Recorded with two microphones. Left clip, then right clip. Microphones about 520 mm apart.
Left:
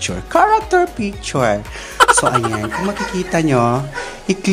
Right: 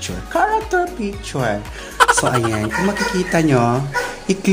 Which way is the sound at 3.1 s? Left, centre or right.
Left.